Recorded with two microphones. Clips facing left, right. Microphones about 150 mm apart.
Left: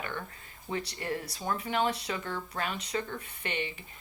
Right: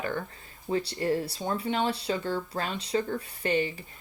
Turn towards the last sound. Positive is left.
turn(degrees=-35)  # may be behind; listen again after turning